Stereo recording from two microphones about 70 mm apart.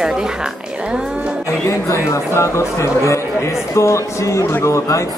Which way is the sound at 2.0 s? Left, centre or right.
Left.